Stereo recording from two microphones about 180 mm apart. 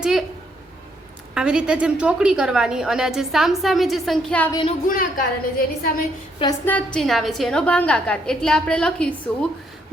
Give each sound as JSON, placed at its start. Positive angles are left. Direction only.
{"t": 0.0, "sound": "a woman's voice", "side_deg": -5}
{"t": 1.3, "sound": "a woman's voice", "side_deg": -5}
{"t": 4.9, "sound": "a woman's voice", "side_deg": 50}
{"t": 6.7, "sound": "a woman's voice", "side_deg": 5}